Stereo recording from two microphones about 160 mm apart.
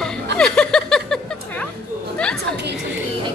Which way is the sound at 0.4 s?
5° left (ahead or behind).